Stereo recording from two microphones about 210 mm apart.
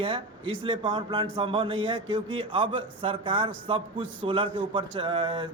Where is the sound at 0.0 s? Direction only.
25° right (ahead or behind).